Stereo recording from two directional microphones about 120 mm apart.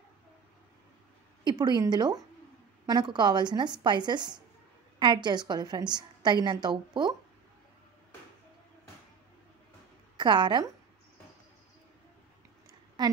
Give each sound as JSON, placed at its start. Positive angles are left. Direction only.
{"t": 1.4, "sound": "a woman's voice", "side_deg": -40}
{"t": 10.1, "sound": "a woman's voice", "side_deg": -40}